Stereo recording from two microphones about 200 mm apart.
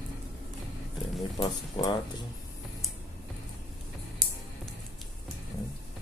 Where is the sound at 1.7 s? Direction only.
20° left (ahead or behind).